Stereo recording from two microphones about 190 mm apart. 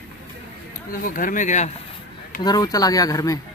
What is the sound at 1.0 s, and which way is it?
Speech, 45° left (ahead or behind).